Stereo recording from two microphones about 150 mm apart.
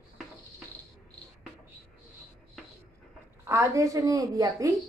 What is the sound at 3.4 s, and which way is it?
A woman's voice, 20° right (ahead or behind).